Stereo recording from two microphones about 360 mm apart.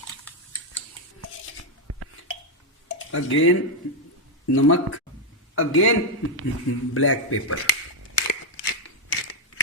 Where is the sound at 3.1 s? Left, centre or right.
Left.